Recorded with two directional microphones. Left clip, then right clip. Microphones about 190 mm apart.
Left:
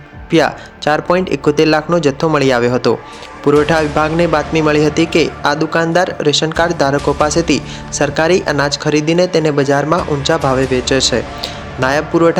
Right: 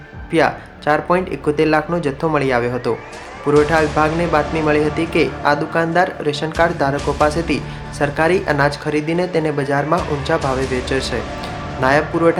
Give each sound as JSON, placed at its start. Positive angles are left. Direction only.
{"t": 0.3, "sound": "speech", "side_deg": 30}